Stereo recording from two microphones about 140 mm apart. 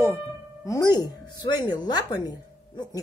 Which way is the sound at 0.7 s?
25° left (ahead or behind).